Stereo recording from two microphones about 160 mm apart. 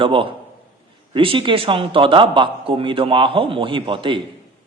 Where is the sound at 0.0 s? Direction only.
35° right (ahead or behind).